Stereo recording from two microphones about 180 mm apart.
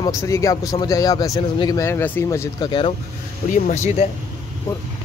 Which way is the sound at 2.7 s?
30° left (ahead or behind).